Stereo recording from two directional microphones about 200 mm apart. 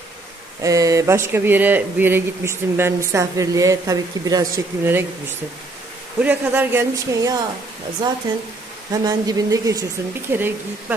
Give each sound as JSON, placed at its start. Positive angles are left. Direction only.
{"t": 0.6, "sound": "speech", "side_deg": -15}
{"t": 6.2, "sound": "speech", "side_deg": -10}
{"t": 8.9, "sound": "speech", "side_deg": -20}